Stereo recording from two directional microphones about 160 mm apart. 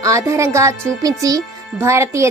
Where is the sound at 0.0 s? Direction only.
20° right (ahead or behind).